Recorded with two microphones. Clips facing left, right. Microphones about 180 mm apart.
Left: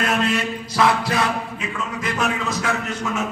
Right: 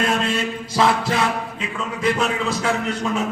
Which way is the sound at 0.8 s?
25° right (ahead or behind).